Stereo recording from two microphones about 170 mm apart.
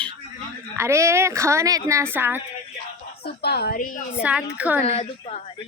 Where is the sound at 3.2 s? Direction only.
70° left (ahead or behind); by 4.0 s 55° left (ahead or behind).